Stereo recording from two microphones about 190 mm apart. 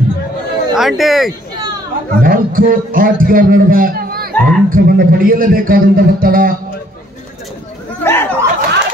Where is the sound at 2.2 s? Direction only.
50° right (ahead or behind).